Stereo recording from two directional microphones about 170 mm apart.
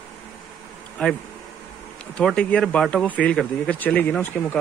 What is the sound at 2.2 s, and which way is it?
Speech, 5° left (ahead or behind).